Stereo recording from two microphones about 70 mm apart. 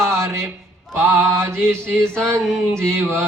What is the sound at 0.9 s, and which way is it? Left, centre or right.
Mantra, right.